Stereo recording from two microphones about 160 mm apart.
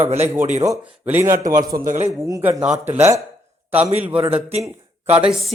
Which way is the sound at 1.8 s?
50° right (ahead or behind).